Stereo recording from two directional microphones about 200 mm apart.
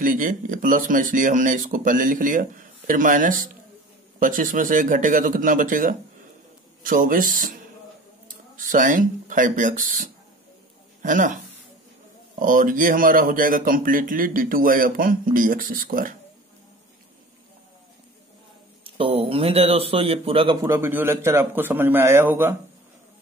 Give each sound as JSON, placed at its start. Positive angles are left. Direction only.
{"t": 0.0, "sound": "speech", "side_deg": -40}
{"t": 8.5, "sound": "speech", "side_deg": -40}
{"t": 12.4, "sound": "speech", "side_deg": -45}
{"t": 18.9, "sound": "a man's voice", "side_deg": -25}
{"t": 20.6, "sound": "a man's voice", "side_deg": -10}